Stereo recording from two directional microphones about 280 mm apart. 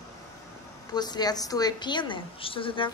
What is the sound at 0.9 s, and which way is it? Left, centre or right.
A woman's voice, centre.